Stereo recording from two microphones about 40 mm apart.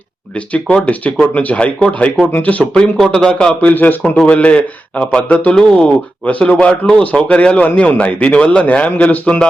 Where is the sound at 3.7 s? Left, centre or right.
Left.